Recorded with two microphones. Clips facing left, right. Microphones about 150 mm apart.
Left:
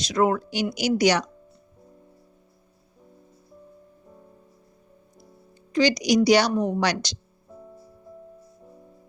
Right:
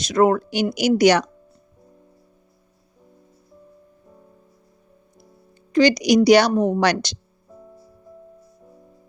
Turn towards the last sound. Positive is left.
turn(degrees=0)  # may be behind; listen again after turning